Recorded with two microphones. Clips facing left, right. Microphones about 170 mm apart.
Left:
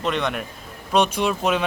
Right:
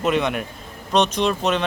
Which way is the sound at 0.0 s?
5° right (ahead or behind).